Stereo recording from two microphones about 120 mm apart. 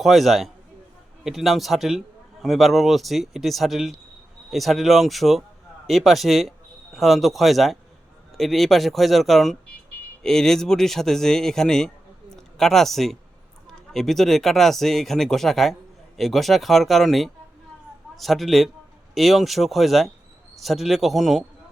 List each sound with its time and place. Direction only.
0.0 s a man's voice: centre (ahead or behind)